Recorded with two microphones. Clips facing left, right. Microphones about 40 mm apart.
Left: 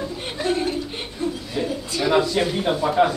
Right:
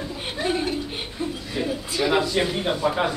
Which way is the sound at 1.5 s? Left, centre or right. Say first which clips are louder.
Left 1 dB; centre.